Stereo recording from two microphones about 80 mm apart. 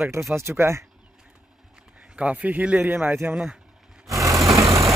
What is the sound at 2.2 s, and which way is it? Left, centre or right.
Speech, centre.